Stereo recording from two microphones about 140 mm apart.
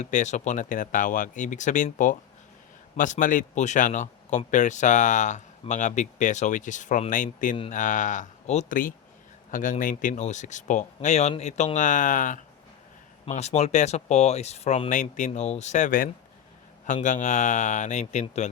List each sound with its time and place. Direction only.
0.0 s a man's voice: 60° left (ahead or behind)
8.7 s a man's voice: 75° left (ahead or behind)
13.2 s speech: 50° left (ahead or behind)
15.3 s a man's voice: 50° left (ahead or behind)